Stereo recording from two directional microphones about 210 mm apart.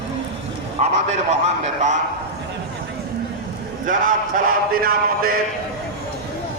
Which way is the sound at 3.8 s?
40° right (ahead or behind).